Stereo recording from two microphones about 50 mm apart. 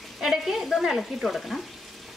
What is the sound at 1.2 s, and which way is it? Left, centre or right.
Speech, centre.